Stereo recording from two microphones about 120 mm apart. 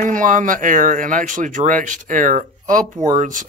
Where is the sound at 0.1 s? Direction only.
90° right.